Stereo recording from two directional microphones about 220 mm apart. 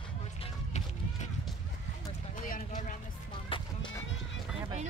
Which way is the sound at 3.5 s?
25° left (ahead or behind).